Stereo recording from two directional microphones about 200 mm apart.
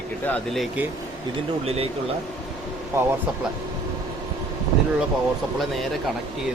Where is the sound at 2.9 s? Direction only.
15° right (ahead or behind).